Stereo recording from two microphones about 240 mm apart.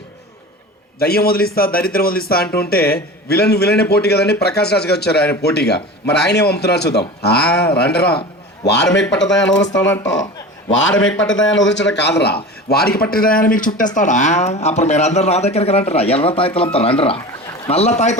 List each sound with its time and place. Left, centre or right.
0.9 s a man's voice: left
9.2 s speech: centre
10.7 s a man's voice: left